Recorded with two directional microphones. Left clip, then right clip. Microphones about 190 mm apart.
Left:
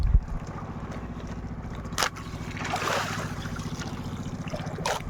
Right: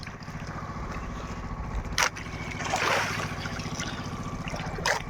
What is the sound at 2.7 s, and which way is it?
Boat, 55° left (ahead or behind).